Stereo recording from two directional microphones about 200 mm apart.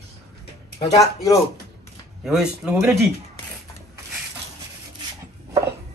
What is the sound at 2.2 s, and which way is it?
Speech, 5° right (ahead or behind).